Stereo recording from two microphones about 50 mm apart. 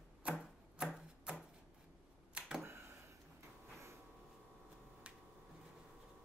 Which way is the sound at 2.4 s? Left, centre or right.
Right.